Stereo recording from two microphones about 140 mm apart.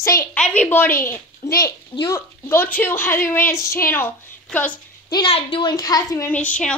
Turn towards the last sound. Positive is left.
turn(degrees=10)  # may be behind; listen again after turning